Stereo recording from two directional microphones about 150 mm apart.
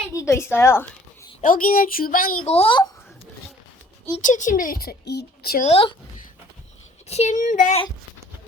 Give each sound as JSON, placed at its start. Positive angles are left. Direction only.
{"t": 0.1, "sound": "a woman's voice", "side_deg": 20}
{"t": 1.4, "sound": "a woman's voice", "side_deg": 65}
{"t": 2.5, "sound": "a child's voice", "side_deg": 40}
{"t": 4.2, "sound": "a woman's voice", "side_deg": 60}
{"t": 5.6, "sound": "a child's voice", "side_deg": 40}
{"t": 7.1, "sound": "speech", "side_deg": 50}